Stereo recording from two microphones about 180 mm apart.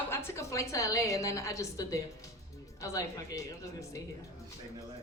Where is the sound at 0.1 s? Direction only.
15° left (ahead or behind).